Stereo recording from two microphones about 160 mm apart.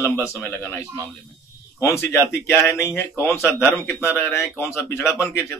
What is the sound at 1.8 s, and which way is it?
A man's voice, 15° left (ahead or behind).